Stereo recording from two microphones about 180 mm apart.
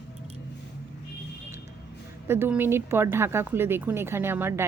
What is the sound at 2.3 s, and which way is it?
Speech, 10° right (ahead or behind).